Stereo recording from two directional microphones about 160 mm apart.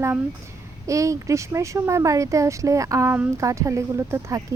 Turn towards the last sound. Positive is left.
turn(degrees=-20)  # may be behind; listen again after turning